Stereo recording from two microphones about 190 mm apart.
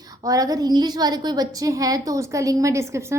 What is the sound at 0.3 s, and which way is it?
A woman's voice, 20° right (ahead or behind).